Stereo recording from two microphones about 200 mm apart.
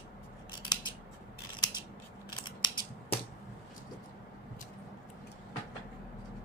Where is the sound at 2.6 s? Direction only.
25° left (ahead or behind).